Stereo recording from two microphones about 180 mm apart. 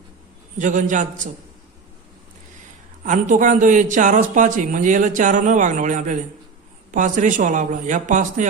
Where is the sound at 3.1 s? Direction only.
45° right (ahead or behind).